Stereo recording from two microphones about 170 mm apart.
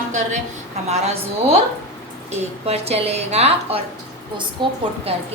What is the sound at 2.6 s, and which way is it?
A woman's voice, 35° right (ahead or behind).